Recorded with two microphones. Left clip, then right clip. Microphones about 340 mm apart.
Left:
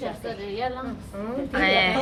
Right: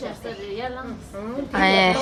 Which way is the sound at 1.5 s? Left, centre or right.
Centre.